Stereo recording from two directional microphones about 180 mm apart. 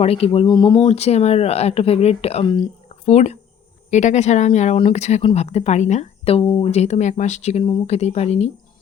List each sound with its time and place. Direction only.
0.0 s speech: 35° left (ahead or behind)
0.9 s speech: 35° left (ahead or behind)